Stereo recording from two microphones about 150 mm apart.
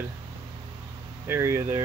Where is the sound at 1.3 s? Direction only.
15° right (ahead or behind).